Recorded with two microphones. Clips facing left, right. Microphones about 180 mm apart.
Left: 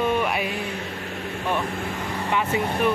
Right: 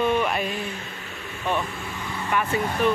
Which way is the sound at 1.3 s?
55° left (ahead or behind).